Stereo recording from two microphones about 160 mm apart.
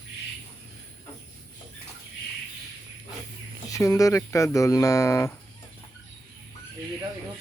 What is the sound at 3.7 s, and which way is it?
Speech, 20° left (ahead or behind).